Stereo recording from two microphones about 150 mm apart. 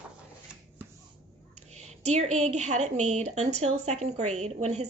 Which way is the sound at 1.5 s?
50° right (ahead or behind).